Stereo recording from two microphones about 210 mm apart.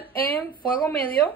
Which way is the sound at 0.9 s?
25° right (ahead or behind).